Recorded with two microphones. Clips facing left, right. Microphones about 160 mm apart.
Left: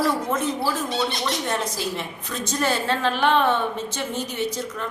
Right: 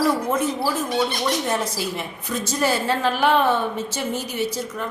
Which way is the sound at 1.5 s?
5° right (ahead or behind).